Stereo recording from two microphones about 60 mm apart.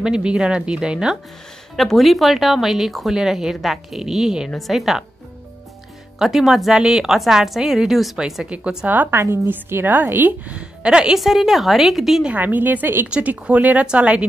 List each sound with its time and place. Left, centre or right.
0.0 s speech: centre
1.8 s speech: centre
6.1 s speech: centre
8.5 s a woman's voice: right
9.3 s a woman's voice: right
10.5 s a woman's voice: centre
11.1 s speech: centre
12.3 s a woman's voice: right